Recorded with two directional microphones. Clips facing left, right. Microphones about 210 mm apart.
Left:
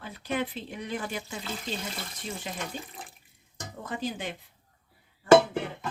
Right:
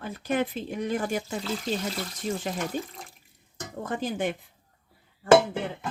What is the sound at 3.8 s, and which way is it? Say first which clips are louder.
Speech: right 5 dB; 50° right (ahead or behind).